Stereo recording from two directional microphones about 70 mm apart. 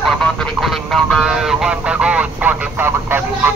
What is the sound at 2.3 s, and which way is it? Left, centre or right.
Speech, right.